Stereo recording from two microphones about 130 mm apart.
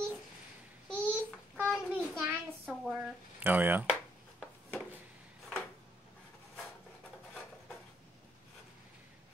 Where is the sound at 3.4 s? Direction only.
15° right (ahead or behind).